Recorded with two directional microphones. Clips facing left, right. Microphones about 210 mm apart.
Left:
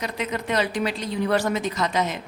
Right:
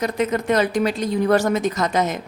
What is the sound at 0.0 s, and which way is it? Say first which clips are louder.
A woman's voice: right 7 dB; 45° right (ahead or behind).